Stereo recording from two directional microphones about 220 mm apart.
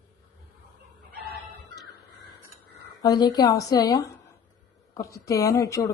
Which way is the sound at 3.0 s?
15° left (ahead or behind).